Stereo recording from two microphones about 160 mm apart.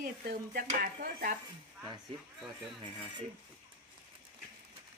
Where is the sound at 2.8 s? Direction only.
30° right (ahead or behind).